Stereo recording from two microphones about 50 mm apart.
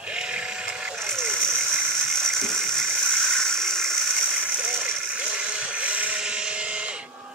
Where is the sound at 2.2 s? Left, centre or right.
Centre.